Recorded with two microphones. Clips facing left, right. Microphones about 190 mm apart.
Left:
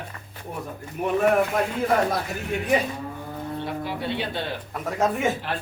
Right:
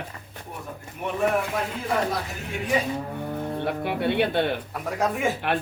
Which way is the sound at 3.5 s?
60° right (ahead or behind).